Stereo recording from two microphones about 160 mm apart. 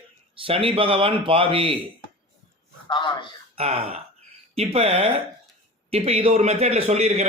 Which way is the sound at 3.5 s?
35° right (ahead or behind).